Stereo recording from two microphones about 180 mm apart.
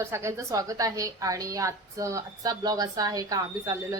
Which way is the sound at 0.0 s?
15° right (ahead or behind).